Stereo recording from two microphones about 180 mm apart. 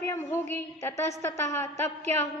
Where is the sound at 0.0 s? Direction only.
15° left (ahead or behind).